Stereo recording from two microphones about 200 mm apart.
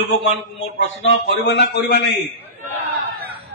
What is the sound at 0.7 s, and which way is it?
A man's voice, 65° left (ahead or behind).